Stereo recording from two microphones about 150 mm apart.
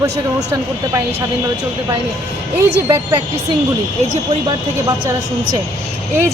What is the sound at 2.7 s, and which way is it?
Speech, 15° right (ahead or behind).